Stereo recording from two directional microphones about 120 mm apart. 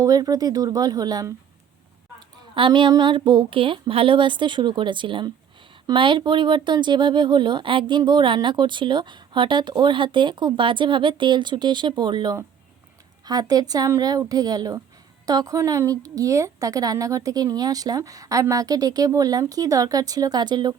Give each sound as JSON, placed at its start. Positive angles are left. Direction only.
{"t": 0.0, "sound": "a woman's voice", "side_deg": -30}